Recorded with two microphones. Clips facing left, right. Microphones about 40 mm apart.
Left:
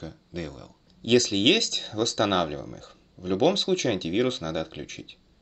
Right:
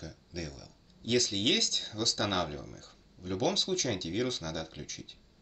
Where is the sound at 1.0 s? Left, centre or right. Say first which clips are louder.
Left 8 dB; left.